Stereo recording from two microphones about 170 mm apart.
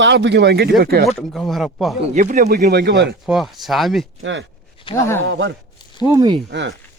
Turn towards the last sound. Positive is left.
turn(degrees=-90)